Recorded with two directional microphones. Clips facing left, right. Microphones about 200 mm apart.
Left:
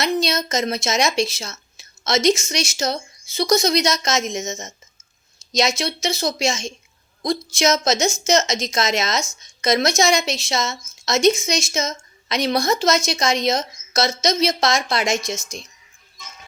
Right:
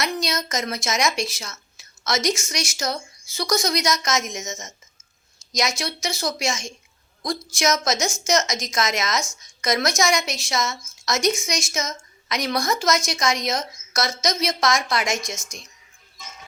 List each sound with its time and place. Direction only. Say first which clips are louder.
0.0 s a woman's voice: left 5 dB; 25° left (ahead or behind)